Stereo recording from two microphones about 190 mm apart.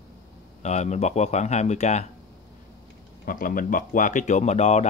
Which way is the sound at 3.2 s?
50° left (ahead or behind).